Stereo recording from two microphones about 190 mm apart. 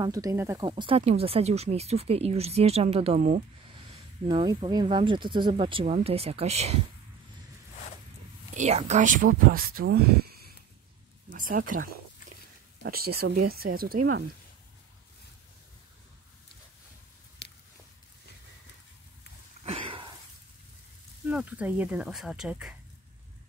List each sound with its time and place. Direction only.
0.0 s speech: 20° right (ahead or behind); by 3.4 s 40° right (ahead or behind)
3.6 s speech: 25° right (ahead or behind)
8.5 s speech: 35° right (ahead or behind); by 14.2 s 50° right (ahead or behind)
17.4 s a sound: 65° left (ahead or behind)
19.6 s a sound: 30° right (ahead or behind)
21.3 s speech: 5° right (ahead or behind)